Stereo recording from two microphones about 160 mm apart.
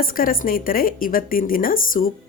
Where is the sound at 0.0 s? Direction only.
65° left (ahead or behind).